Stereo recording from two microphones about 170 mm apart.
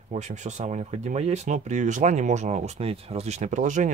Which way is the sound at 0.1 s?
45° right (ahead or behind).